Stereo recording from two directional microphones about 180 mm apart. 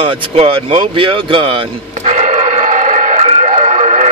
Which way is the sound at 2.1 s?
45° right (ahead or behind).